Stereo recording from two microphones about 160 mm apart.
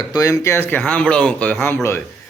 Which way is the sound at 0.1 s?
20° left (ahead or behind).